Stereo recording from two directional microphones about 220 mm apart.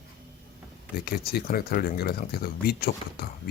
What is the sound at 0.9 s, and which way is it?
Speech, 45° left (ahead or behind).